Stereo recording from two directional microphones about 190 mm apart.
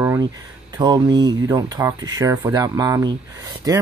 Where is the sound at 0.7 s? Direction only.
20° right (ahead or behind).